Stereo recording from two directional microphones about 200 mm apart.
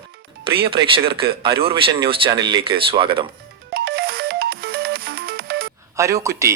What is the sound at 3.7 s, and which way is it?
Music, 50° right (ahead or behind).